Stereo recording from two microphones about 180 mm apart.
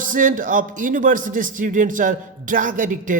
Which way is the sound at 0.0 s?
50° right (ahead or behind).